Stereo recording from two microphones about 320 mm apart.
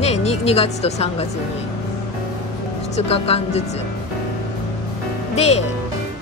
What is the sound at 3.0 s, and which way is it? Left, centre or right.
Speech, centre.